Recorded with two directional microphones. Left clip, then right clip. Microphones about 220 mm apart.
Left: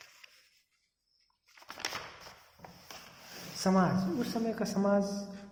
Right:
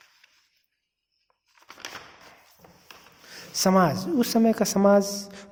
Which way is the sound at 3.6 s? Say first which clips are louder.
Right 9 dB; 50° right (ahead or behind).